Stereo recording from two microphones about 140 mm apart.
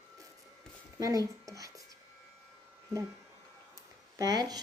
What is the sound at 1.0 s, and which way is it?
Speech, 25° right (ahead or behind).